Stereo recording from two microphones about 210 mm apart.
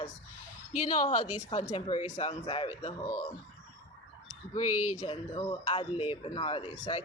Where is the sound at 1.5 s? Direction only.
25° left (ahead or behind).